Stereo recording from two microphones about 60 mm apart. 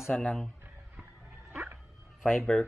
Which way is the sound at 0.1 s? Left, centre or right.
Centre.